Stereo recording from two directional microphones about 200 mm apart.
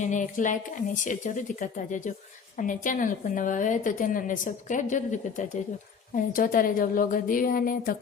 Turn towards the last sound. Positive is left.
turn(degrees=45)  # may be behind; listen again after turning